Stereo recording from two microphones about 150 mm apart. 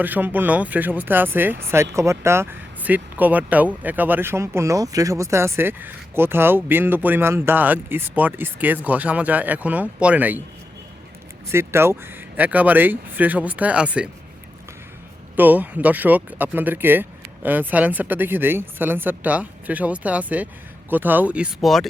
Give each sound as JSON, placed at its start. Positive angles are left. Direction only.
{"t": 0.0, "sound": "speech", "side_deg": -10}
{"t": 11.5, "sound": "speech", "side_deg": -15}
{"t": 15.4, "sound": "speech", "side_deg": -10}